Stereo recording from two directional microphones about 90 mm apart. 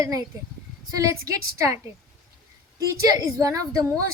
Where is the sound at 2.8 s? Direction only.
40° right (ahead or behind).